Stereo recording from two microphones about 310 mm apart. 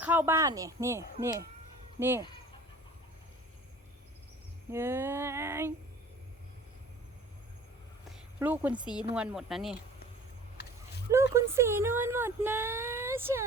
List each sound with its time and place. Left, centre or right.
0.0 s speech: centre
4.7 s speech: centre
8.1 s speech: centre
10.6 s a sound: left
11.1 s speech: centre